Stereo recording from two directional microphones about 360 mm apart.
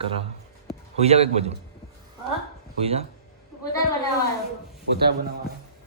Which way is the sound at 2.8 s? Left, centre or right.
Centre.